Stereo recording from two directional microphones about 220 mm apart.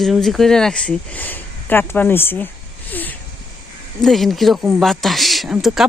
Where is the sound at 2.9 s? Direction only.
10° left (ahead or behind).